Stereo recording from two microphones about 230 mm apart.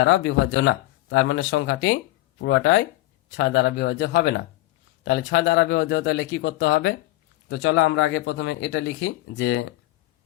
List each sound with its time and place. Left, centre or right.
0.0 s speech: left